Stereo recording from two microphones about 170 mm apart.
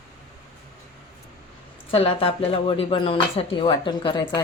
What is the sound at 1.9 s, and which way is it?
Speech, 35° left (ahead or behind).